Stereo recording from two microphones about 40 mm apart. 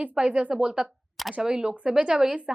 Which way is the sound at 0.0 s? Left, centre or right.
Right.